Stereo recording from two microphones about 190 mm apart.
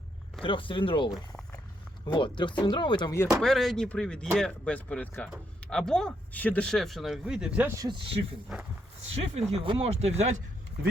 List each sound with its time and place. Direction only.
0.4 s speech: 25° left (ahead or behind)
3.4 s speech: centre (ahead or behind)
7.8 s speech: 25° right (ahead or behind)